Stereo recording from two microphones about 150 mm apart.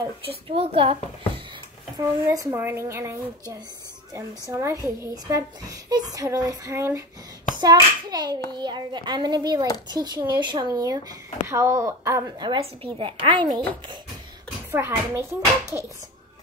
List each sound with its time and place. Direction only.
0.2 s speech: 40° right (ahead or behind)
2.0 s a woman's voice: 20° right (ahead or behind)
12.4 s speech: 35° right (ahead or behind)
14.7 s speech: 15° right (ahead or behind)